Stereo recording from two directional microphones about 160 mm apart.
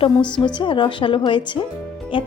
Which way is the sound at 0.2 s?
5° left (ahead or behind).